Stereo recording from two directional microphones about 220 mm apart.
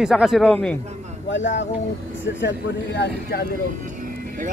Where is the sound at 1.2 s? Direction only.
55° left (ahead or behind).